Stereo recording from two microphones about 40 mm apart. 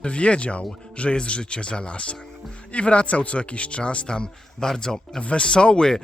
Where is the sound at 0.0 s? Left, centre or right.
Left.